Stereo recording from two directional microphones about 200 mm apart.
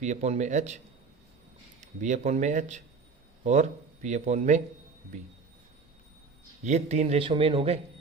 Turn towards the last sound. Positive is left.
turn(degrees=-30)  # may be behind; listen again after turning